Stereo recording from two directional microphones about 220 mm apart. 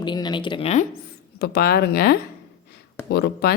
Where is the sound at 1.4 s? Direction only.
45° left (ahead or behind).